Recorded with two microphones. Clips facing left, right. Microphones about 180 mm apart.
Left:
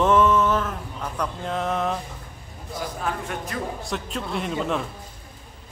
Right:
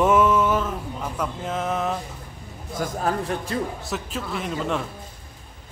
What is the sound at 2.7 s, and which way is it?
Speech, 45° right (ahead or behind).